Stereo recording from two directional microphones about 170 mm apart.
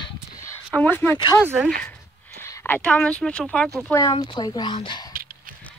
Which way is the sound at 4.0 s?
25° left (ahead or behind).